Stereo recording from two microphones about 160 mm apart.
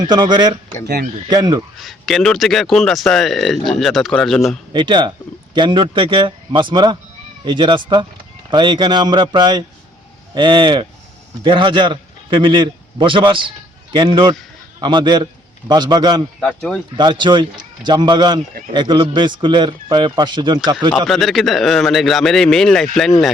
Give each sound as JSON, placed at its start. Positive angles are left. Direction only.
{"t": 0.0, "sound": "a man's voice", "side_deg": -25}
{"t": 1.8, "sound": "a man's voice", "side_deg": 0}
{"t": 4.7, "sound": "a man's voice", "side_deg": -30}
{"t": 16.4, "sound": "a man's voice", "side_deg": 5}
{"t": 17.0, "sound": "a man's voice", "side_deg": -30}
{"t": 21.1, "sound": "a man's voice", "side_deg": 0}